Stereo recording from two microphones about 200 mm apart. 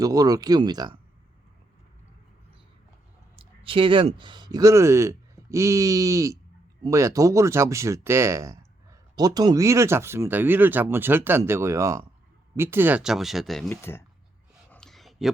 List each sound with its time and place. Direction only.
0.0 s speech: 20° right (ahead or behind)
3.3 s speech: 25° right (ahead or behind); by 14.0 s 10° left (ahead or behind)
14.7 s a sound: 5° left (ahead or behind)